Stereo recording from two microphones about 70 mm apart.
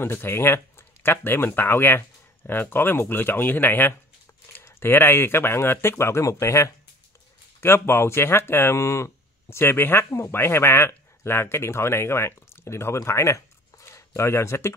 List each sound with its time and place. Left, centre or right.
0.0 s speech: left
7.6 s speech: left